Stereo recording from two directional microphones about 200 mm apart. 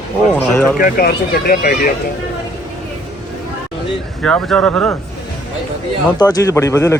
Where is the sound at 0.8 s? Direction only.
50° left (ahead or behind).